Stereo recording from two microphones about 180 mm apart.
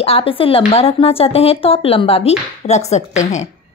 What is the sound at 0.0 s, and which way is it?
Speech, 30° left (ahead or behind).